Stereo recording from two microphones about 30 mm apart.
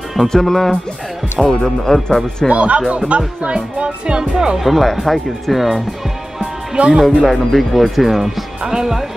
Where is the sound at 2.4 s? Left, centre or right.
Right.